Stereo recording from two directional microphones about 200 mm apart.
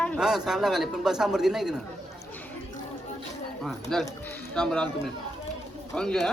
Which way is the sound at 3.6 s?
Centre (ahead or behind).